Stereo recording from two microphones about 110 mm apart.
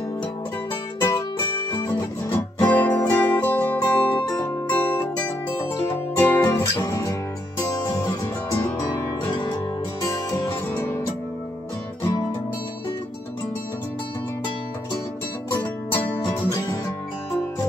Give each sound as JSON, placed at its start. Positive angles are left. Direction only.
{"t": 1.7, "sound": "music", "side_deg": 35}
{"t": 2.2, "sound": "music", "side_deg": 15}
{"t": 10.3, "sound": "music", "side_deg": 20}
{"t": 15.6, "sound": "music", "side_deg": 20}